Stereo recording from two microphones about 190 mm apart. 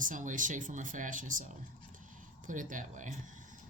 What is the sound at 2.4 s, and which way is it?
Speech, 45° right (ahead or behind).